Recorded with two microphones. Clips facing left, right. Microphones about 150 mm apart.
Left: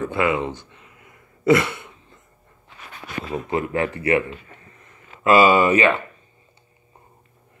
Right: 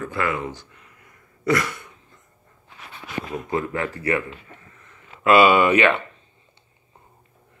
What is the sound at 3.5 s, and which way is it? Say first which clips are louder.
Speech: left 3 dB; 20° left (ahead or behind).